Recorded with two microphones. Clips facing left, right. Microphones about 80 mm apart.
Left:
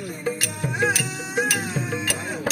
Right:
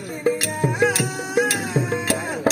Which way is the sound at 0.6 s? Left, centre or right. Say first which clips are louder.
Right 3 dB; right.